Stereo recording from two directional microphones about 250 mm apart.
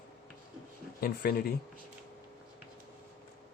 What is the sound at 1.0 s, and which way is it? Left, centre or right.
Speech, left.